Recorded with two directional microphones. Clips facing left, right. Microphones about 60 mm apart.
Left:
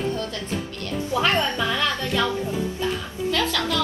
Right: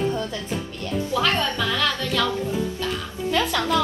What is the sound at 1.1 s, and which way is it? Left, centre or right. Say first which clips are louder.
A woman's voice: left 2 dB; left.